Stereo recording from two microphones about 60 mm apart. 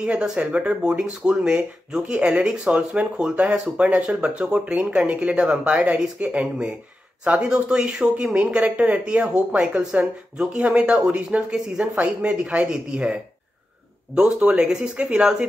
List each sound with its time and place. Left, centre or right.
0.0 s speech: centre
11.5 s speech: centre
11.9 s speech: right